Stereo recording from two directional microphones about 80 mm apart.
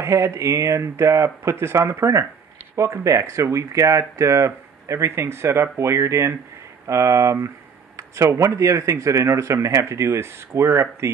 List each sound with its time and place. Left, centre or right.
0.0 s speech: right